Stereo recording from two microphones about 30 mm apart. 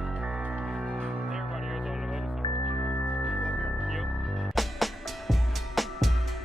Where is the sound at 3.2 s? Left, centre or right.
Centre.